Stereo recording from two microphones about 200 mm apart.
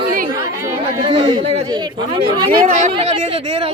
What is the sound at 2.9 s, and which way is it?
Speech, 30° right (ahead or behind).